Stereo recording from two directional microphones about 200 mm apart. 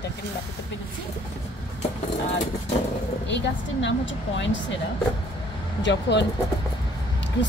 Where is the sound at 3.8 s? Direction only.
65° left (ahead or behind).